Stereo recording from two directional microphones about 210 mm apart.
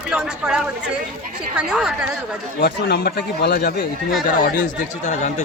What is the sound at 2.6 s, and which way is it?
Speech, 50° left (ahead or behind).